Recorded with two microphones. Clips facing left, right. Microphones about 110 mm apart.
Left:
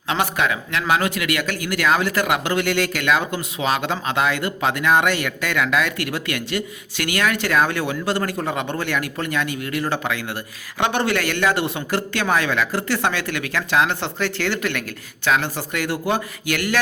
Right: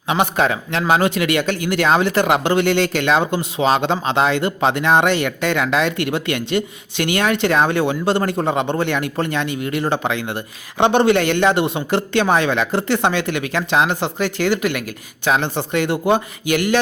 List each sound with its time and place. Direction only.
0.3 s speech: 35° right (ahead or behind)